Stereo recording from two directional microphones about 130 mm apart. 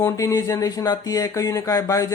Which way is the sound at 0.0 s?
25° left (ahead or behind).